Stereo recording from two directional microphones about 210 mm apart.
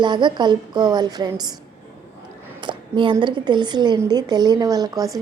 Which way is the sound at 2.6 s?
25° right (ahead or behind).